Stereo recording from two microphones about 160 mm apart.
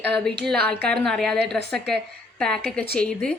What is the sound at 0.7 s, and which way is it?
Speech, 5° left (ahead or behind).